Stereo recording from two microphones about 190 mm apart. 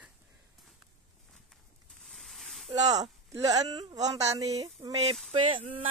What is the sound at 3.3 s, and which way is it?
Female singing, 20° right (ahead or behind).